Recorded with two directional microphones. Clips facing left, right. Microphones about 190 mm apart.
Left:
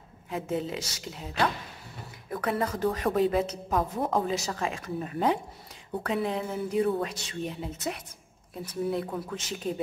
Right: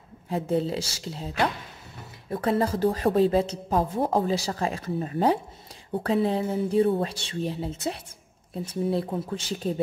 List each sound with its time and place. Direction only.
0.3 s speech: 35° right (ahead or behind)